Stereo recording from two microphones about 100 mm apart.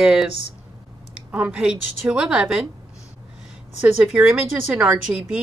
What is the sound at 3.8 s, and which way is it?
Speech, 10° right (ahead or behind).